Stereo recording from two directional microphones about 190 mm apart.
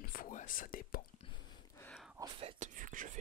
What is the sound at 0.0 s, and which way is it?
Whispering, 50° left (ahead or behind).